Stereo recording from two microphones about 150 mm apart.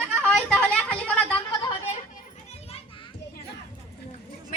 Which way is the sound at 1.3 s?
30° left (ahead or behind).